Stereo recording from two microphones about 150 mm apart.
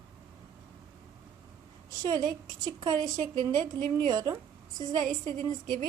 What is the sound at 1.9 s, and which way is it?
A woman's voice, 20° right (ahead or behind).